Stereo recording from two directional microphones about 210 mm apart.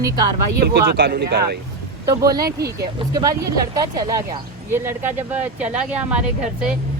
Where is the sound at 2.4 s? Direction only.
50° right (ahead or behind).